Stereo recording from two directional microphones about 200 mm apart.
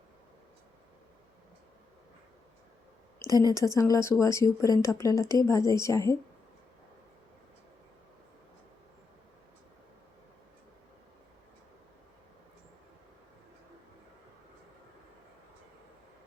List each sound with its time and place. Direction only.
3.2 s speech: 20° left (ahead or behind)